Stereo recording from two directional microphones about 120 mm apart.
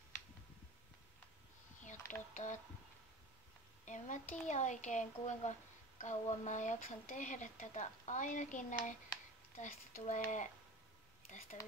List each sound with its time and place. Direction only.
1.8 s mechanisms: 90° left
2.3 s speech: 90° left
3.8 s speech: 90° left
11.5 s speech: 90° left